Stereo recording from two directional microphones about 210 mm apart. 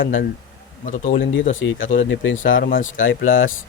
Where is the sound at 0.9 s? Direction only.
35° left (ahead or behind).